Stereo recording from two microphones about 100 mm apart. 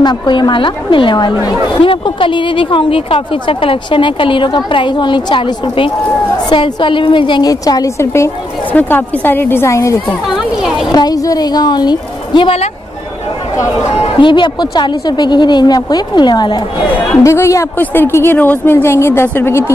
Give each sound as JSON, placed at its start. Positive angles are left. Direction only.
{"t": 0.0, "sound": "a woman's voice", "side_deg": 45}
{"t": 7.4, "sound": "a woman's voice", "side_deg": 35}
{"t": 14.1, "sound": "a woman's voice", "side_deg": 50}
{"t": 17.2, "sound": "a woman's voice", "side_deg": 30}